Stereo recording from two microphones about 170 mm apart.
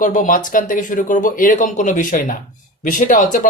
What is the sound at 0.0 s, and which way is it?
Speech, 50° left (ahead or behind).